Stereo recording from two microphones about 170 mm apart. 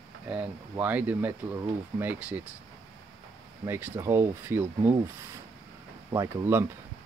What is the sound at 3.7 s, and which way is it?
Speech, 10° right (ahead or behind).